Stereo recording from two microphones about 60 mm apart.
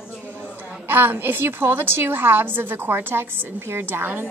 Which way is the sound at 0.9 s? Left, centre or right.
Right.